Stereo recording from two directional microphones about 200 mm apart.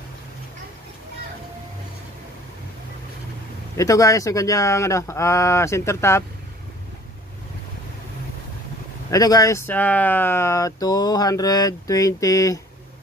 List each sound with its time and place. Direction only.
3.7 s speech: 15° left (ahead or behind)
9.1 s speech: 15° left (ahead or behind)